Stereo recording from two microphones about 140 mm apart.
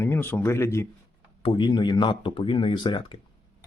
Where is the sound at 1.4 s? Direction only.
35° left (ahead or behind).